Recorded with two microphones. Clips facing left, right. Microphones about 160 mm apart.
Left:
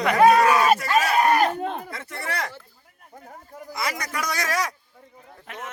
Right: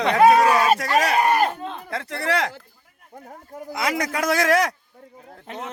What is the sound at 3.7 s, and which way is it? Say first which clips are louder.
Speech: right 6 dB; 60° right (ahead or behind).